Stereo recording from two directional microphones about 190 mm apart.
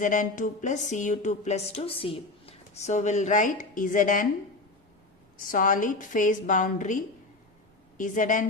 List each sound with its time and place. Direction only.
0.0 s speech: 45° left (ahead or behind)
5.5 s a woman's voice: 45° left (ahead or behind)